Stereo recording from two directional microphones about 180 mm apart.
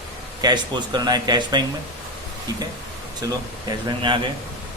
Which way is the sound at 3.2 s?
25° right (ahead or behind).